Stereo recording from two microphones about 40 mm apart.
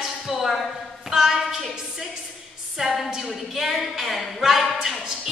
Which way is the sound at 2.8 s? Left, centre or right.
Centre.